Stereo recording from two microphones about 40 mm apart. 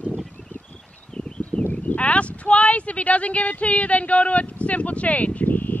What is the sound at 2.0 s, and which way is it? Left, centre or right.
Speech, left.